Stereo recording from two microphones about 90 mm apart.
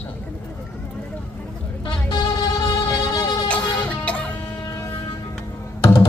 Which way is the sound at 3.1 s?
40° left (ahead or behind).